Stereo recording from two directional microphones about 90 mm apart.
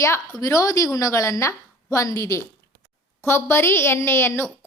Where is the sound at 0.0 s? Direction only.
35° left (ahead or behind).